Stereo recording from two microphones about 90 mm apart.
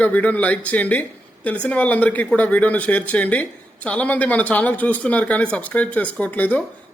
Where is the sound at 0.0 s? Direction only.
15° left (ahead or behind).